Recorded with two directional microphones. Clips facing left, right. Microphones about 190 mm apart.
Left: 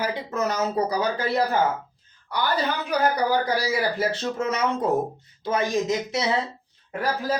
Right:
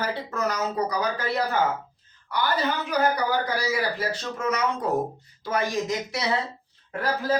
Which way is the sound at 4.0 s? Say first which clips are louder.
Left 3 dB; 25° left (ahead or behind).